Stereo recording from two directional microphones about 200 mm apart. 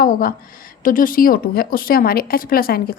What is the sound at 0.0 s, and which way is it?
Speech, 45° left (ahead or behind).